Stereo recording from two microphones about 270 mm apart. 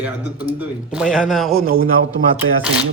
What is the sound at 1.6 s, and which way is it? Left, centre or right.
Speech, right.